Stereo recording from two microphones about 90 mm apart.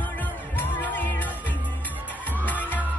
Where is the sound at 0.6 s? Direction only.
20° left (ahead or behind).